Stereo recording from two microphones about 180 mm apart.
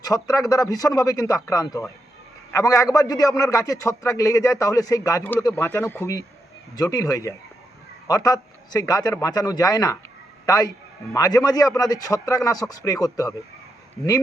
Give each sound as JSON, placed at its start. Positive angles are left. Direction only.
{"t": 0.0, "sound": "a man's voice", "side_deg": 20}